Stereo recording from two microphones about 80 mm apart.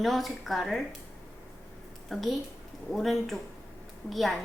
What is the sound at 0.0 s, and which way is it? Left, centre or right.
Speech, centre.